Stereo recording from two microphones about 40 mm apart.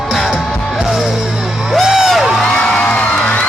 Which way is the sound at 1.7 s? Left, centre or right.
Centre.